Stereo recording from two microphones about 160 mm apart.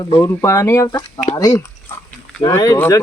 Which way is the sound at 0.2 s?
20° left (ahead or behind).